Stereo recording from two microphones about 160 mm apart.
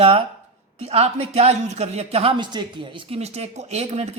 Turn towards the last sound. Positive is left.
turn(degrees=-40)  # may be behind; listen again after turning